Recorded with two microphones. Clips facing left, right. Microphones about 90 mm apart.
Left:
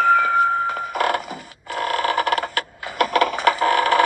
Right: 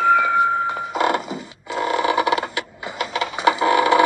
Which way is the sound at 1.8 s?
10° right (ahead or behind).